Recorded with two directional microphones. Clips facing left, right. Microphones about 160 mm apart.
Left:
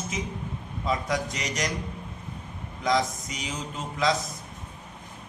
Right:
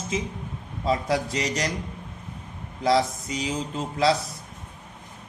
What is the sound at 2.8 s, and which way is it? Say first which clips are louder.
Speech: right 4 dB; 30° right (ahead or behind).